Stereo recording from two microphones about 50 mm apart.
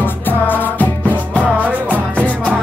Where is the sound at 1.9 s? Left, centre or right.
Right.